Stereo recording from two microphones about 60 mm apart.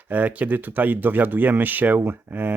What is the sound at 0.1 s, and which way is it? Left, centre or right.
Speech, right.